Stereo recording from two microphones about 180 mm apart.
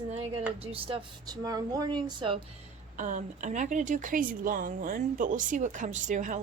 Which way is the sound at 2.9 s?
45° right (ahead or behind).